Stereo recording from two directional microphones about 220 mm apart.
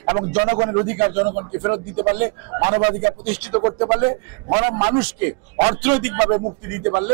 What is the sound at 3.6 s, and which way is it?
Speech, 25° right (ahead or behind).